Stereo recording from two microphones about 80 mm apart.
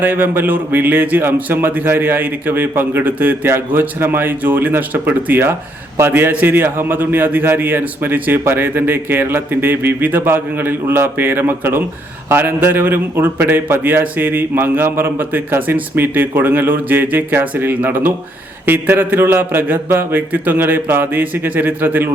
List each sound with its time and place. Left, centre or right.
0.0 s a man's voice: right